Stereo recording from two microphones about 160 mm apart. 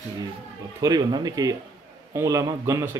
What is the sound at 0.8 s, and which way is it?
A man's voice, 25° right (ahead or behind).